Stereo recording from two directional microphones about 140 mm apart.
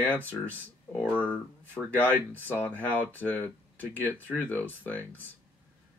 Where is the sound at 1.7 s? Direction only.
10° left (ahead or behind).